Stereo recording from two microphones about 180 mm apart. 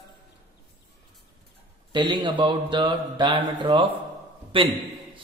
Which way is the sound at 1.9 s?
25° right (ahead or behind).